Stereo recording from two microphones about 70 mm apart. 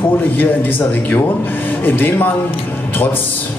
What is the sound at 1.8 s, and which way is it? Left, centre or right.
Speech, left.